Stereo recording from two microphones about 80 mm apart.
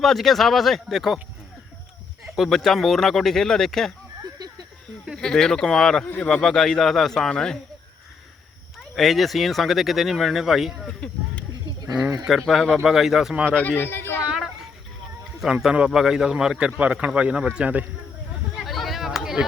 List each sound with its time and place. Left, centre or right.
0.0 s speech: centre
2.2 s speech: centre
5.1 s speech: centre
9.0 s speech: centre
10.8 s speech: centre
12.4 s speech: centre
13.5 s speech: centre
14.3 s a sound: centre
15.6 s a man's voice: centre
18.6 s a sound: centre